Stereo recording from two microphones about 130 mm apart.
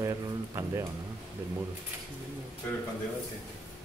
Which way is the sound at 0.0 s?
20° right (ahead or behind).